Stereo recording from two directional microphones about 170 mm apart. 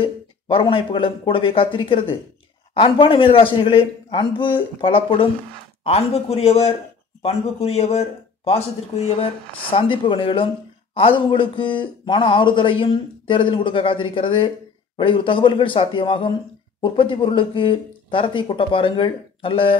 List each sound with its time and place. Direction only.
0.0 s a man's voice: 30° left (ahead or behind)